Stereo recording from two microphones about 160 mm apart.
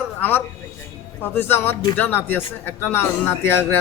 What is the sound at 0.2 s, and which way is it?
Speech, 10° left (ahead or behind).